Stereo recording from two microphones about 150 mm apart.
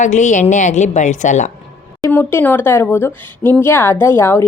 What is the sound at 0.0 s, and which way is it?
A woman's voice, 55° left (ahead or behind).